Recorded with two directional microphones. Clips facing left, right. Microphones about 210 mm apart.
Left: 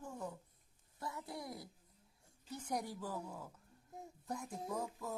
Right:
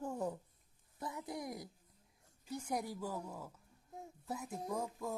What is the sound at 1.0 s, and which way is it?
A child's voice, 15° right (ahead or behind).